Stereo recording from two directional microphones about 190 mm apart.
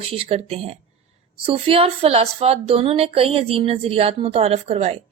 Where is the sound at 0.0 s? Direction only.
30° right (ahead or behind).